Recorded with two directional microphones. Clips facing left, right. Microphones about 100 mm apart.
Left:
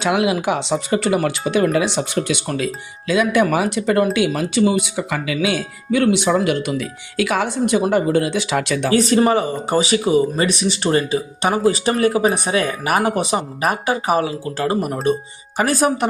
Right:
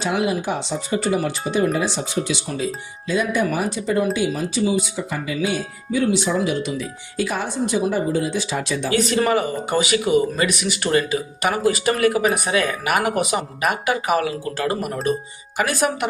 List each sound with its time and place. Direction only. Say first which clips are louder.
0.0 s speech: left 4 dB; 80° left; by 2.6 s 60° left (ahead or behind)
3.1 s speech: left 5 dB; 85° left; by 8.9 s 65° left (ahead or behind)
8.9 s speech: left 4 dB; 35° left (ahead or behind)